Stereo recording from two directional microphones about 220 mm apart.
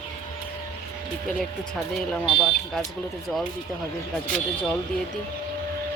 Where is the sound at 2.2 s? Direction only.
25° left (ahead or behind).